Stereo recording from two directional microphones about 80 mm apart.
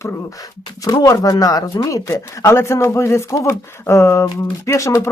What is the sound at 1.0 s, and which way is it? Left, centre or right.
Speech, left.